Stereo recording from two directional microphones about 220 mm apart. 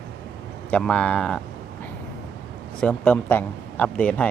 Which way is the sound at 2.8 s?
5° left (ahead or behind).